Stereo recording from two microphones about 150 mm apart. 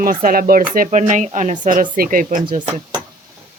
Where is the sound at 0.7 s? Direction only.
60° right (ahead or behind).